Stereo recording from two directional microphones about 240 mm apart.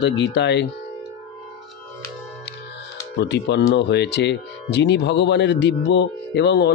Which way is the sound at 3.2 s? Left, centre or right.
Left.